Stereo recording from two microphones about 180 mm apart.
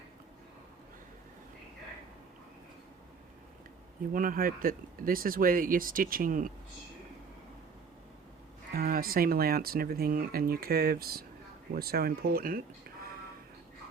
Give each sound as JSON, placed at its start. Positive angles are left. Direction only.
{"t": 4.1, "sound": "speech", "side_deg": -50}
{"t": 8.7, "sound": "speech", "side_deg": -55}